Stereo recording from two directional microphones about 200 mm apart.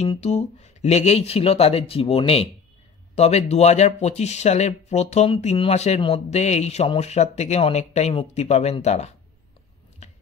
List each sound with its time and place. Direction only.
0.0 s speech: 30° left (ahead or behind)